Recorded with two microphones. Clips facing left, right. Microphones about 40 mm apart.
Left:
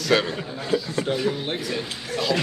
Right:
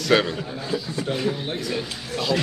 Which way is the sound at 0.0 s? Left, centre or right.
Centre.